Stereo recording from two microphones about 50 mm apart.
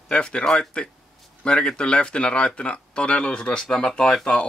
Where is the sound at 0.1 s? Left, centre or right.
Centre.